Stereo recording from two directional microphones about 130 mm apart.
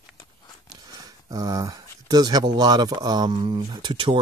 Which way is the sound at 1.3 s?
30° right (ahead or behind).